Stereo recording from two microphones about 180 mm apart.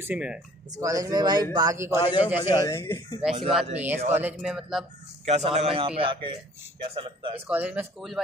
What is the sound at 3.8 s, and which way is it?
Speech, 10° right (ahead or behind).